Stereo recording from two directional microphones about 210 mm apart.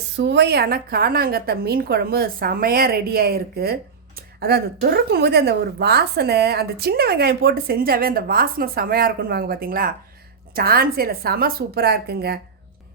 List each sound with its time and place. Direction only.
0.2 s a woman's voice: 50° right (ahead or behind)